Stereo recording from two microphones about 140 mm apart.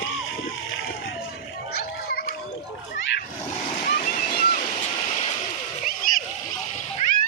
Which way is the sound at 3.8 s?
90° left.